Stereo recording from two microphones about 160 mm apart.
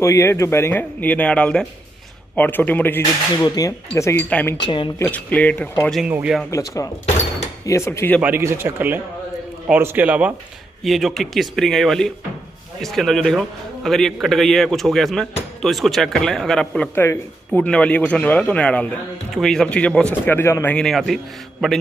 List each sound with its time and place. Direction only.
0.0 s speech: 20° left (ahead or behind)
3.4 s speech: 20° left (ahead or behind)
4.6 s speech: 30° left (ahead or behind)
4.9 s speech: 10° left (ahead or behind)
5.9 s a man's voice: 5° right (ahead or behind)
6.5 s speech: 20° left (ahead or behind)
8.2 s a man's voice: 15° right (ahead or behind)